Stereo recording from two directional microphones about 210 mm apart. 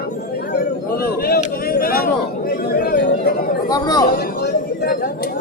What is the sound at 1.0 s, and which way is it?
Speech, 45° left (ahead or behind).